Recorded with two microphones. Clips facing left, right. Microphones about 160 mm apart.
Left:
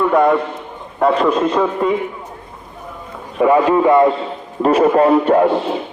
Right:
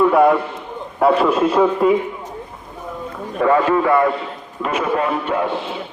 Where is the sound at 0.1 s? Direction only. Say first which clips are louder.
Even; 5° right (ahead or behind).